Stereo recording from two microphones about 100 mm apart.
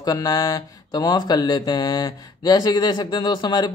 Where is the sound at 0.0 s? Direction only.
40° left (ahead or behind).